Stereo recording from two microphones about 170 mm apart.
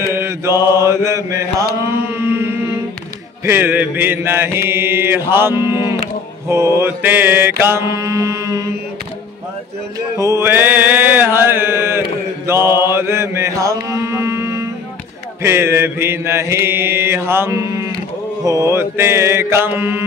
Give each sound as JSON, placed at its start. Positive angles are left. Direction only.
{"t": 0.0, "sound": "mantra", "side_deg": -15}
{"t": 2.0, "sound": "a sound", "side_deg": -15}
{"t": 3.4, "sound": "mantra", "side_deg": -15}
{"t": 9.9, "sound": "mantra", "side_deg": -15}